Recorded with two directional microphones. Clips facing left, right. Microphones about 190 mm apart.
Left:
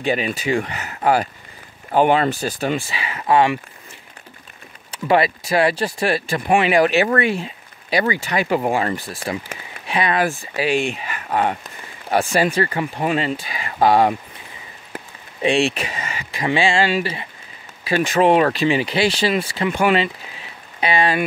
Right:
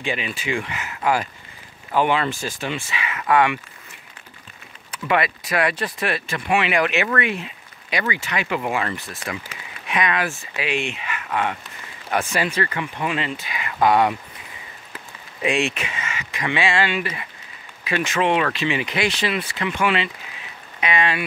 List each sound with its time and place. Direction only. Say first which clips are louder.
0.0 s speech: left 6 dB; 40° left (ahead or behind)
5.0 s speech: left 5 dB; 35° left (ahead or behind)
15.4 s speech: left 4 dB; 30° left (ahead or behind)